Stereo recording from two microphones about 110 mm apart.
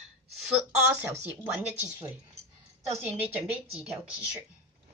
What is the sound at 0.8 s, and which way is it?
Speech, 25° right (ahead or behind).